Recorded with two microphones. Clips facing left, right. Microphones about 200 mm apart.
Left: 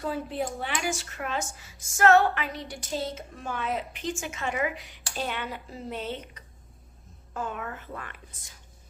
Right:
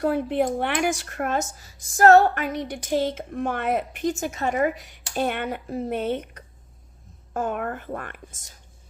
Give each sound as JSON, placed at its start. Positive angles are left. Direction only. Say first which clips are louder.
{"t": 0.0, "sound": "speech", "louder": "right 8 dB", "side_deg": -60}
{"t": 2.6, "sound": "speech", "louder": "right 8 dB", "side_deg": -55}
{"t": 5.1, "sound": "speech", "louder": "right 7 dB", "side_deg": -55}